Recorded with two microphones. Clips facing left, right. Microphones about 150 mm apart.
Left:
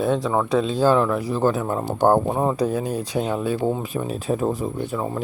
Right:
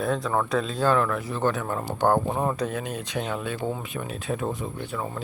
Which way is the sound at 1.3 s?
35° left (ahead or behind).